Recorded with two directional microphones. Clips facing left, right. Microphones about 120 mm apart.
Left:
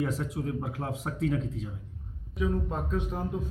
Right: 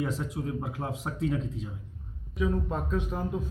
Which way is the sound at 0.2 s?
15° right (ahead or behind).